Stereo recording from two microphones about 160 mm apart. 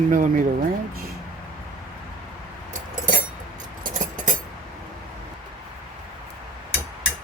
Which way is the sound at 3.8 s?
55° right (ahead or behind).